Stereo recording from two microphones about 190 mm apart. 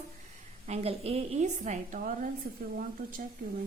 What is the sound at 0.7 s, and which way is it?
A woman's voice, 30° right (ahead or behind).